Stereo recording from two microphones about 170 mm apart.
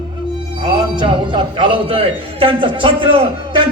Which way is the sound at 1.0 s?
30° right (ahead or behind).